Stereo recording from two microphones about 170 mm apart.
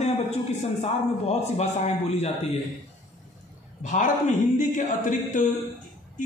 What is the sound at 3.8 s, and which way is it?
Speech, 50° left (ahead or behind).